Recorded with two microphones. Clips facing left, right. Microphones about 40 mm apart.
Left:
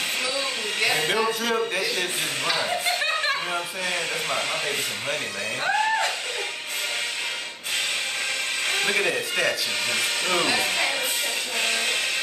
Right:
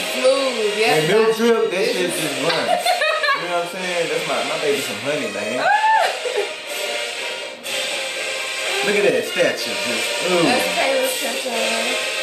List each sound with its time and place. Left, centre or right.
0.2 s speech: centre
2.5 s chuckle: right
3.9 s speech: centre
5.6 s music: centre
8.7 s speech: centre
11.5 s music: centre